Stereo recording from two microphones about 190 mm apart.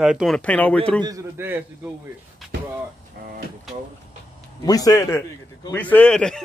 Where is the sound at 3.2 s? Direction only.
55° right (ahead or behind).